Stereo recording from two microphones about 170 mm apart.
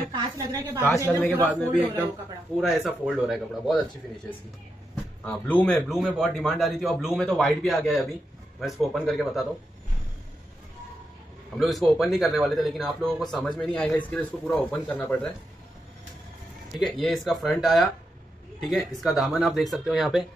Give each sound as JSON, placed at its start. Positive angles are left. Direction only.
{"t": 0.1, "sound": "speech", "side_deg": -20}
{"t": 0.8, "sound": "speech", "side_deg": 10}
{"t": 2.6, "sound": "a man's voice", "side_deg": 0}
{"t": 5.2, "sound": "a man's voice", "side_deg": 10}
{"t": 11.5, "sound": "a man's voice", "side_deg": 0}
{"t": 16.7, "sound": "a man's voice", "side_deg": 0}